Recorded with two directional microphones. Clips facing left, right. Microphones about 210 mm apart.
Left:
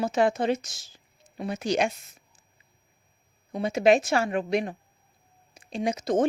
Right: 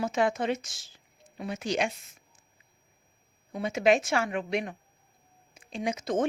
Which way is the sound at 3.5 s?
35° left (ahead or behind).